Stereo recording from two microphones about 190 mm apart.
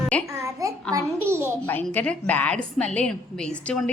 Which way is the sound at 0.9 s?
15° right (ahead or behind).